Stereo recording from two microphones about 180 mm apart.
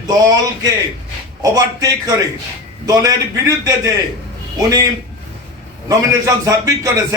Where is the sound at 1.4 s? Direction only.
20° right (ahead or behind).